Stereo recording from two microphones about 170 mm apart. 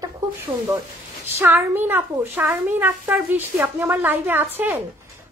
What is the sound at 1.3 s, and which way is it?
A woman's voice, 15° right (ahead or behind).